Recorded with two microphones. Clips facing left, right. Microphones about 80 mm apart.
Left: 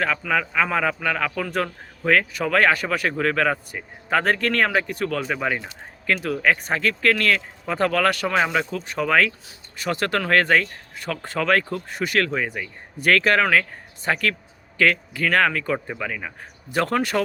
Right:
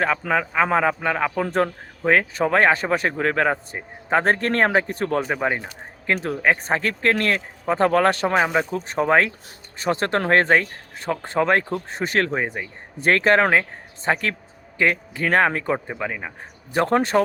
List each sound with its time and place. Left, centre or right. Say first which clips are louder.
0.2 s a man's voice: right 2 dB; right